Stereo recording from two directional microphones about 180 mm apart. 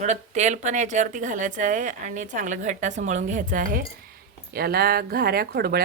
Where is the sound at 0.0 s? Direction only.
40° right (ahead or behind).